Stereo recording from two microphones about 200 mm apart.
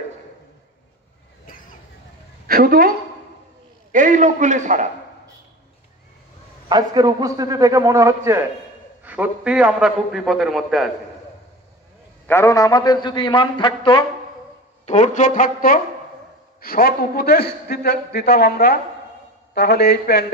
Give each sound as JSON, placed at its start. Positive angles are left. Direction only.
{"t": 2.4, "sound": "a woman's voice", "side_deg": -45}
{"t": 3.9, "sound": "a man's voice", "side_deg": -40}
{"t": 6.7, "sound": "a man's voice", "side_deg": -20}
{"t": 12.3, "sound": "a man's voice", "side_deg": 15}
{"t": 14.9, "sound": "a man's voice", "side_deg": 35}